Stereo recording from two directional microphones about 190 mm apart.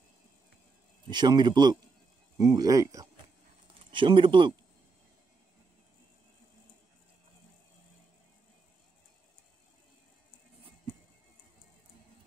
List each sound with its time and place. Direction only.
1.0 s speech: 25° right (ahead or behind)